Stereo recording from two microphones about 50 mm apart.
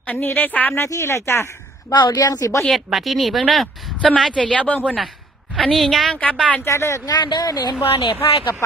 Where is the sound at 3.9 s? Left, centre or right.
Left.